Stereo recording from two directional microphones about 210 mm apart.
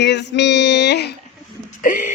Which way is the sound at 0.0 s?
55° left (ahead or behind).